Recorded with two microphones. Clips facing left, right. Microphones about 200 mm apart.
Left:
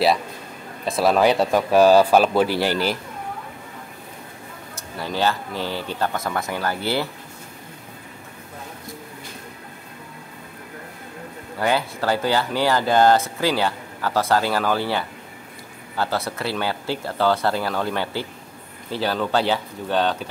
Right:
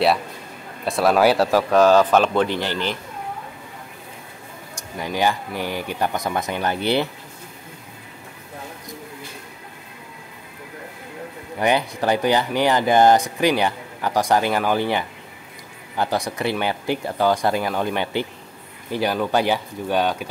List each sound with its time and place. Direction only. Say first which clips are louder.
0.8 s speech: right 1 dB; centre (ahead or behind)
1.7 s speech: left 2 dB; 10° left (ahead or behind)
4.9 s speech: right 1 dB; 15° right (ahead or behind)
11.6 s speech: right 2 dB; 20° right (ahead or behind)